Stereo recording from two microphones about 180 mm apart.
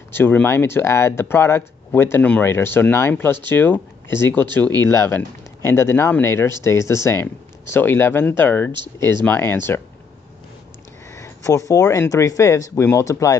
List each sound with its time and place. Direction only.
0.1 s speech: 10° left (ahead or behind)
11.1 s speech: 15° left (ahead or behind)